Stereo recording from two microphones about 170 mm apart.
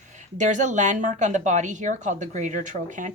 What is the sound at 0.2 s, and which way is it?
Speech, 45° right (ahead or behind).